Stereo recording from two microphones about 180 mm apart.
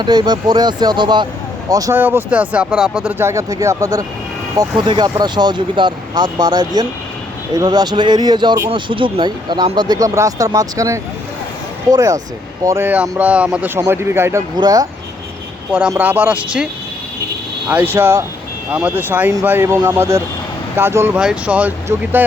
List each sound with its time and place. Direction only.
0.0 s speech: 20° right (ahead or behind)
15.9 s speech: 10° right (ahead or behind)
17.7 s speech: 10° right (ahead or behind)